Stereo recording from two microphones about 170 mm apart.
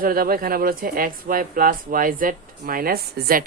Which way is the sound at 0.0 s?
60° right (ahead or behind).